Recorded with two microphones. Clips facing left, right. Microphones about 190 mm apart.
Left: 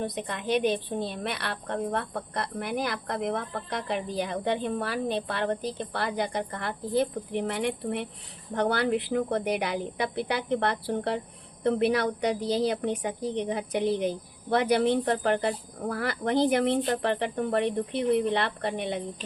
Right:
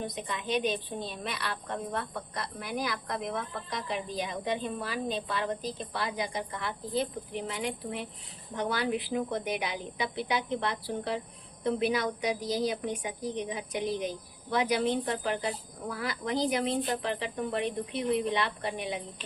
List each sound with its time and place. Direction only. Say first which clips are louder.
0.0 s a woman's voice: left 4 dB; 65° left (ahead or behind)